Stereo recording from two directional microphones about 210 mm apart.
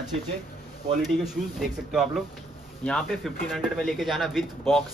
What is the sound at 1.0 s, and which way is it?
A man's voice, centre (ahead or behind).